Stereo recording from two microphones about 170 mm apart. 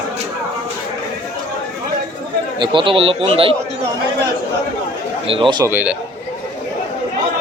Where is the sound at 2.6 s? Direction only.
30° right (ahead or behind).